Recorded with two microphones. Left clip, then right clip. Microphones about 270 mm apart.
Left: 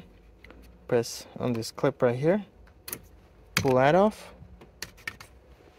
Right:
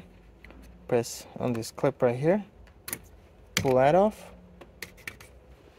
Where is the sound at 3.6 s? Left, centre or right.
Centre.